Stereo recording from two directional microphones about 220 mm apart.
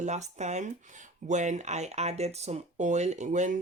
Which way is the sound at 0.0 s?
30° right (ahead or behind).